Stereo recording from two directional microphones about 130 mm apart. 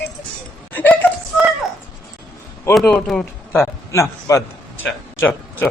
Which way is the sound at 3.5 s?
20° left (ahead or behind).